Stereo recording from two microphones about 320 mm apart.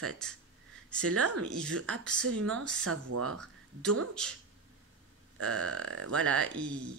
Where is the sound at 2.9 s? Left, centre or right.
Right.